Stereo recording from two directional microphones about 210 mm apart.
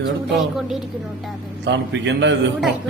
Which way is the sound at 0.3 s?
Centre (ahead or behind).